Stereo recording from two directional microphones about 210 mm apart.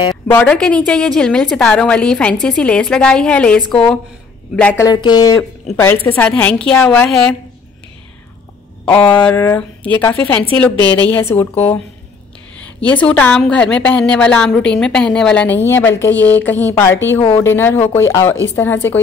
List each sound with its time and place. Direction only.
0.1 s a woman's voice: 5° left (ahead or behind)
4.8 s a woman's voice: 20° left (ahead or behind); by 7.3 s 5° left (ahead or behind)
8.8 s a woman's voice: 5° left (ahead or behind)
12.6 s a woman's voice: 5° left (ahead or behind)